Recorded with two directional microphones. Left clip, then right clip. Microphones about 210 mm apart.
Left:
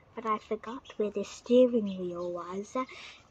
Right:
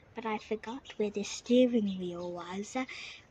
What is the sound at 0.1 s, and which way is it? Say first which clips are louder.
Speech: left 4 dB; 25° right (ahead or behind).